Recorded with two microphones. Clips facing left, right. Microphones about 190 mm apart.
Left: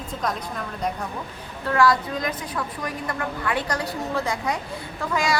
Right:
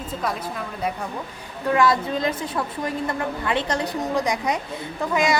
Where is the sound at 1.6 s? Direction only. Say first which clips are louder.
Right 1 dB; 20° right (ahead or behind).